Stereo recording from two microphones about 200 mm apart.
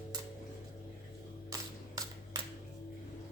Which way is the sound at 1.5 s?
15° right (ahead or behind).